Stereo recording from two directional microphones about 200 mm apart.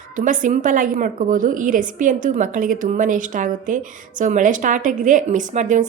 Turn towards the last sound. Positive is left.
turn(degrees=-40)  # may be behind; listen again after turning